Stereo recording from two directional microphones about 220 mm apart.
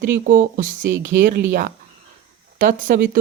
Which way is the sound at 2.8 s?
40° right (ahead or behind).